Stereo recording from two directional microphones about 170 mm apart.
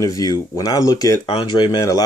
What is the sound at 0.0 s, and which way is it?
Speech, 20° left (ahead or behind).